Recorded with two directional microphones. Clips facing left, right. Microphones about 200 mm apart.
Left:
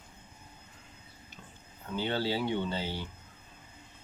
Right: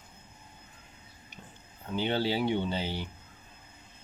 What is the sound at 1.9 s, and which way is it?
Speech, 20° right (ahead or behind).